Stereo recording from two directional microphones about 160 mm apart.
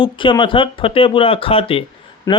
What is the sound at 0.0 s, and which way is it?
A man's voice, 30° left (ahead or behind).